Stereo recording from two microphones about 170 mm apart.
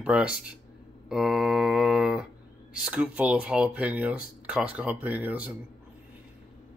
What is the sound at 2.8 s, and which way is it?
Speech, 5° right (ahead or behind).